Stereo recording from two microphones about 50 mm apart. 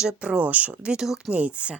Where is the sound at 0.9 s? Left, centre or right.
Centre.